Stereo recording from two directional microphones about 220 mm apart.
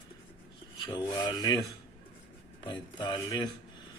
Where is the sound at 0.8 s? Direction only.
20° left (ahead or behind).